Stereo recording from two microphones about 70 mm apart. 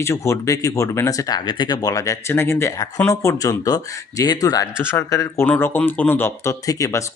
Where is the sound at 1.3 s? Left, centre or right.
Left.